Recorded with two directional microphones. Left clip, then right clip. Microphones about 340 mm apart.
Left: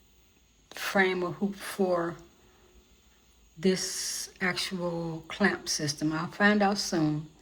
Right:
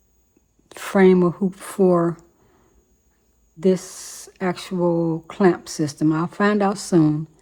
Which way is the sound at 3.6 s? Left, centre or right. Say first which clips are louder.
Right 8 dB; centre.